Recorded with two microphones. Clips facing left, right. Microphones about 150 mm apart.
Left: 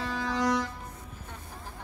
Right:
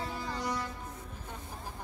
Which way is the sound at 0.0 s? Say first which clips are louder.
Left 7 dB; 90° left.